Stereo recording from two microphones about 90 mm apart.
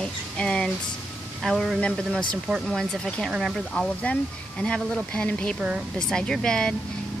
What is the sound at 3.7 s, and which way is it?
Speech, 15° left (ahead or behind).